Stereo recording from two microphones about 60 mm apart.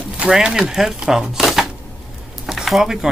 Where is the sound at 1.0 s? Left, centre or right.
Centre.